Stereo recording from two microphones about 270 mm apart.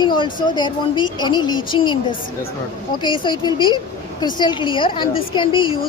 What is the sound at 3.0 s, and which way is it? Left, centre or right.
Speech, centre.